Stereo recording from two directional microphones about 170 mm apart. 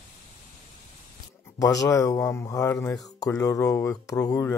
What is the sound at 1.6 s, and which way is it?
Speech, 20° left (ahead or behind).